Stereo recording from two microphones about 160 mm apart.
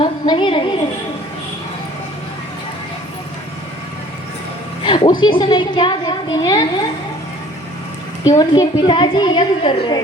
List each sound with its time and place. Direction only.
0.0 s a woman's voice: 30° left (ahead or behind)
4.8 s music: 30° left (ahead or behind)
5.2 s a woman's voice: 30° left (ahead or behind)
8.3 s a woman's voice: 25° left (ahead or behind)